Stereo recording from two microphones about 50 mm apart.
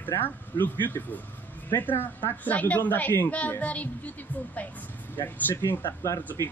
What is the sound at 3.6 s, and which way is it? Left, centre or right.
A woman's voice, left.